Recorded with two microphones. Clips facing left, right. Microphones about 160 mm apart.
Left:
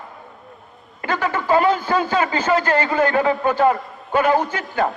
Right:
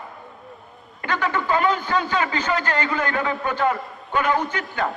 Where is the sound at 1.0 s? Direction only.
35° left (ahead or behind).